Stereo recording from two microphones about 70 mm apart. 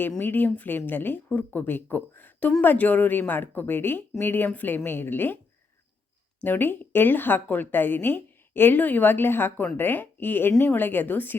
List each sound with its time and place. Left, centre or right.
0.2 s a woman's voice: left
6.4 s a woman's voice: left